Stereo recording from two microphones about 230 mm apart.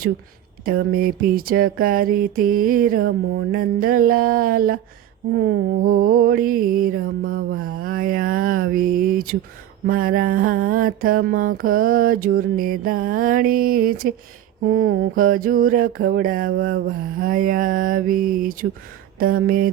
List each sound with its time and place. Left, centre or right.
0.6 s mantra: right